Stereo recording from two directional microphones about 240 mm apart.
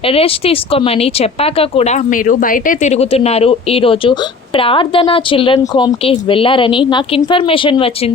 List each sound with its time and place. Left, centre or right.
0.1 s speech: left